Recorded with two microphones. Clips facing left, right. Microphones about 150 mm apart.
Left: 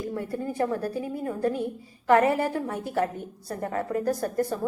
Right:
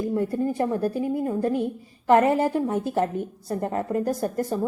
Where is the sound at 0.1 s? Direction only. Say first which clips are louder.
Right 6 dB; 20° right (ahead or behind).